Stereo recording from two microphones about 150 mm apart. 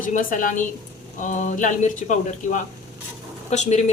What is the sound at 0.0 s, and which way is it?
Speech, 65° left (ahead or behind).